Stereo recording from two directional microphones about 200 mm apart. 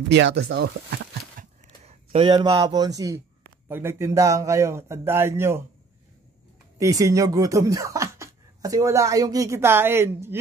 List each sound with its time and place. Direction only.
0.1 s speech: 60° right (ahead or behind)
1.4 s a sound: 30° right (ahead or behind)
3.6 s speech: 10° right (ahead or behind)
6.8 s speech: 15° right (ahead or behind)